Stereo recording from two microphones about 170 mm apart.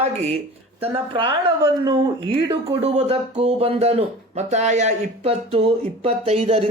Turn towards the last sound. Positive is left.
turn(degrees=-35)  # may be behind; listen again after turning